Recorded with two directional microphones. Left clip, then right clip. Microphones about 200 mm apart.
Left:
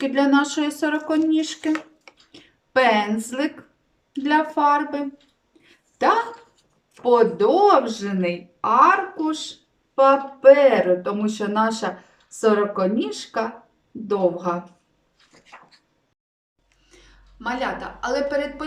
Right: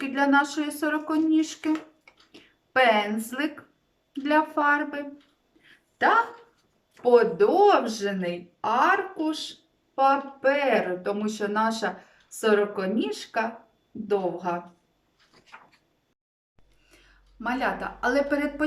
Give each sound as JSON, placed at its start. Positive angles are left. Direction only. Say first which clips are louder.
{"t": 0.0, "sound": "speech", "louder": "left 3 dB", "side_deg": 0}
{"t": 7.0, "sound": "speech", "louder": "left 2 dB", "side_deg": -5}
{"t": 17.4, "sound": "a woman's voice", "louder": "left 2 dB", "side_deg": -30}